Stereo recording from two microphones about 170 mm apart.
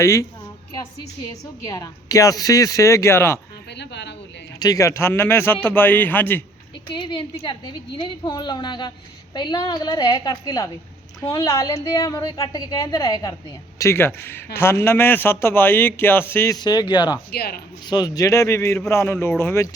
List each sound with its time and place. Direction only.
0.0 s a man's voice: 20° left (ahead or behind)
1.6 s a woman's voice: 20° left (ahead or behind)
3.8 s a woman's voice: 90° left
4.6 s a man's voice: 20° left (ahead or behind)
6.9 s a woman's voice: 25° left (ahead or behind)
17.3 s speech: 65° left (ahead or behind)
17.8 s a man's voice: 25° left (ahead or behind)